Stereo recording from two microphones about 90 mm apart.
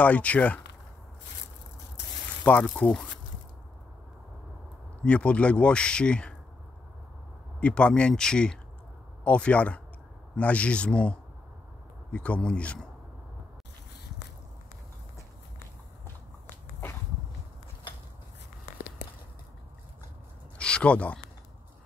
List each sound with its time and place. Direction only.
0.0 s speech: 15° left (ahead or behind)
2.6 s speech: 10° left (ahead or behind)
5.0 s speech: 15° left (ahead or behind)
7.6 s speech: 10° left (ahead or behind)
20.5 s a sound: 10° left (ahead or behind)